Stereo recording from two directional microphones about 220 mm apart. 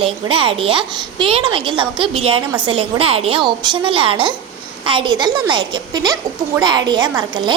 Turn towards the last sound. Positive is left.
turn(degrees=-20)  # may be behind; listen again after turning